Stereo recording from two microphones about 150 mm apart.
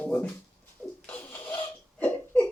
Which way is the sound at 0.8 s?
10° left (ahead or behind).